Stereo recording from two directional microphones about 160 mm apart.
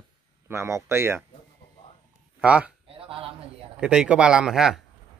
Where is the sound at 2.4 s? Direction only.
10° right (ahead or behind).